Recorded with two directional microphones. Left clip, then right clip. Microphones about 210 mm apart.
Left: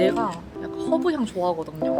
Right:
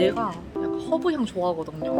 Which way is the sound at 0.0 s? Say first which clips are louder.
Left 1 dB; centre (ahead or behind).